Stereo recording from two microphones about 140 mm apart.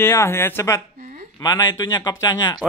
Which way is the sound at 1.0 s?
75° right (ahead or behind).